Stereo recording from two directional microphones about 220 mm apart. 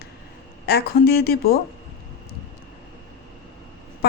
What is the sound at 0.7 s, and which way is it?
Speech, 45° left (ahead or behind).